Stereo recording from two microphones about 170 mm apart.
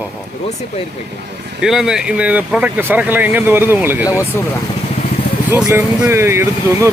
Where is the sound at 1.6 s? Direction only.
5° right (ahead or behind).